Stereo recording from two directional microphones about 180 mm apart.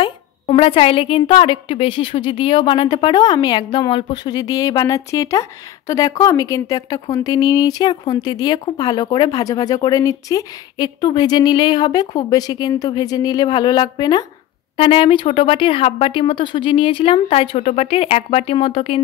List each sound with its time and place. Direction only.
0.0 s a woman's voice: 30° left (ahead or behind)